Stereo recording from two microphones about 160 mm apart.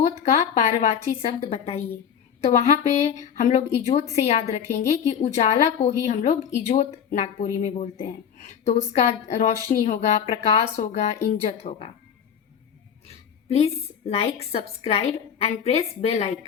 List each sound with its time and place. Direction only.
0.2 s a woman's voice: 45° left (ahead or behind)
13.5 s a woman's voice: 40° left (ahead or behind)